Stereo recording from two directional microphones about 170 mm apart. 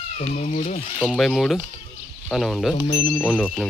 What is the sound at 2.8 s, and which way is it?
Speech, 20° left (ahead or behind).